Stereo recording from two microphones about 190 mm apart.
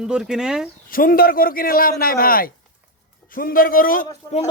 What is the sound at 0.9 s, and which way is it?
A man's voice, 50° left (ahead or behind).